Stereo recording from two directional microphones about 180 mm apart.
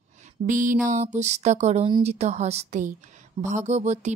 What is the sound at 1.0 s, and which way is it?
Speech, 40° right (ahead or behind).